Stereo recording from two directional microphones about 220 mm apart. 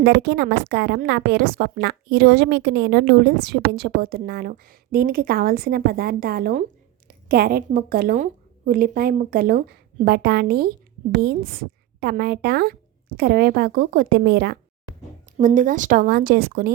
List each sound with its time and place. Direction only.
0.0 s a woman's voice: 50° right (ahead or behind)
15.4 s a woman's voice: 35° right (ahead or behind)